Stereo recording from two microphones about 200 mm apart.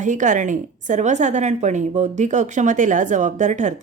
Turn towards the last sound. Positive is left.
turn(degrees=-35)  # may be behind; listen again after turning